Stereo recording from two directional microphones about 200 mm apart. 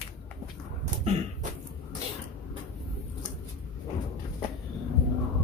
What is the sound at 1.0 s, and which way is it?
Beatboxing, 30° right (ahead or behind).